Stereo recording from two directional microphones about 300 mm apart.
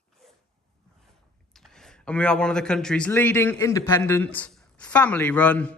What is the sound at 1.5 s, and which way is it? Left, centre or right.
Speech, centre.